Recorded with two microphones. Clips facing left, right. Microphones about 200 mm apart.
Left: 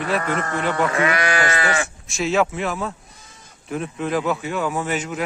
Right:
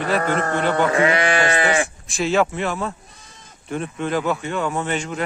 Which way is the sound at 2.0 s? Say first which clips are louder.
Even; centre (ahead or behind).